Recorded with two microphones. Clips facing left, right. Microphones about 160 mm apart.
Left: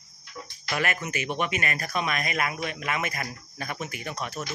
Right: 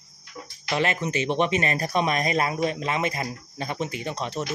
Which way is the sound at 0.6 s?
25° right (ahead or behind).